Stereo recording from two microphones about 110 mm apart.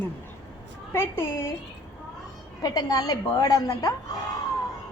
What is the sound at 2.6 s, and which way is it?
A woman's voice, 35° left (ahead or behind).